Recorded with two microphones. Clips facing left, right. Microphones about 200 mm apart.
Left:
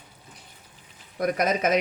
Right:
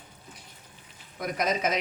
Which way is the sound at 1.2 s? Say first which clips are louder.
Left 4 dB; 55° left (ahead or behind).